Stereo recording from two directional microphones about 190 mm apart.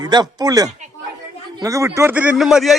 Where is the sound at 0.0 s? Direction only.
20° right (ahead or behind).